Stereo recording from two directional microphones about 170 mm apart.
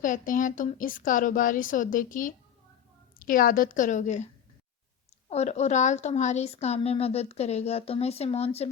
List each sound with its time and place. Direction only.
0.0 s speech: 50° left (ahead or behind)
5.3 s a woman's voice: 40° left (ahead or behind)